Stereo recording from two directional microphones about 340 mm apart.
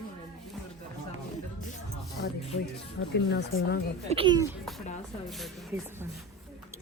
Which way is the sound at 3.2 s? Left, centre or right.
Left.